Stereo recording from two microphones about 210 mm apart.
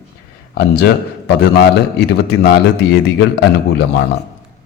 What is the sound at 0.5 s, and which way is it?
A man's voice, 50° left (ahead or behind).